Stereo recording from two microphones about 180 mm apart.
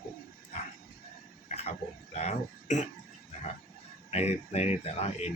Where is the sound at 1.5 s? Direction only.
35° left (ahead or behind).